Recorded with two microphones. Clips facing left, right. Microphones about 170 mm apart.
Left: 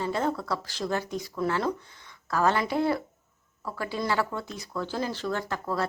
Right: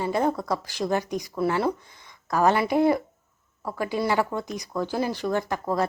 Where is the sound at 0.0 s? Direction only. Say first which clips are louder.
Right 4 dB; 15° right (ahead or behind).